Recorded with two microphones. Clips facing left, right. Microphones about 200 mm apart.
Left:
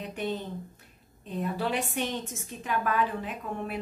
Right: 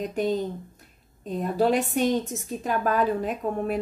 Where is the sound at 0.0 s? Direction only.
40° right (ahead or behind).